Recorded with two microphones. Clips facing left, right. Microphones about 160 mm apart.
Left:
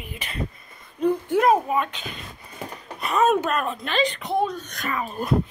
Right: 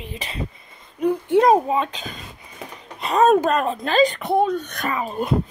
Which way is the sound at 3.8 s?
45° right (ahead or behind).